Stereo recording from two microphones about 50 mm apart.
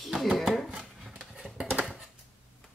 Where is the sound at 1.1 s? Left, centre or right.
Centre.